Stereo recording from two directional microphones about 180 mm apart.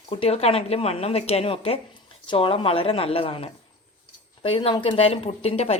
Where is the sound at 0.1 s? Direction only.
35° left (ahead or behind).